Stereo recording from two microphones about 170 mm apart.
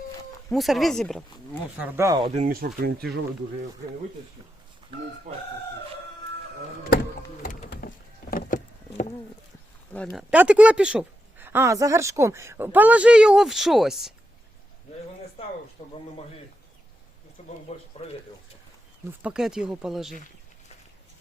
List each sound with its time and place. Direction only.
0.5 s speech: centre (ahead or behind)
1.8 s speech: 20° right (ahead or behind)
2.5 s speech: 65° right (ahead or behind)
5.3 s speech: 45° right (ahead or behind)
7.7 s a sound: 60° left (ahead or behind)
9.9 s a woman's voice: 5° left (ahead or behind)
15.8 s a man's voice: 30° left (ahead or behind)
17.4 s a sound: 40° left (ahead or behind)
19.2 s speech: 5° right (ahead or behind)